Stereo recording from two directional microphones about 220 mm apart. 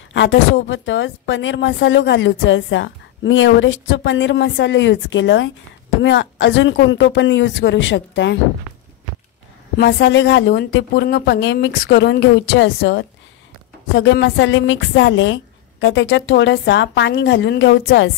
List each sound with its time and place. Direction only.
0.1 s a woman's voice: 60° left (ahead or behind)
9.8 s a woman's voice: 50° left (ahead or behind)